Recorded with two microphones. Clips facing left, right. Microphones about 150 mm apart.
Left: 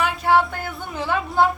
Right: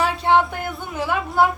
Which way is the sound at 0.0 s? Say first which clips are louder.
Right 1 dB; 25° right (ahead or behind).